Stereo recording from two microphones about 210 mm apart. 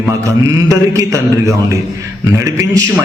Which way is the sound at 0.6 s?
15° right (ahead or behind).